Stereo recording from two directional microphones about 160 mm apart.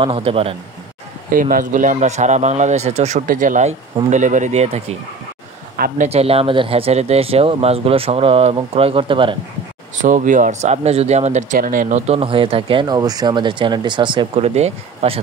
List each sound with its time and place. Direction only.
0.0 s speech: 35° right (ahead or behind)
1.3 s speech: 60° right (ahead or behind); by 4.9 s 40° right (ahead or behind)
6.0 s speech: 40° right (ahead or behind)
10.0 s speech: 55° right (ahead or behind)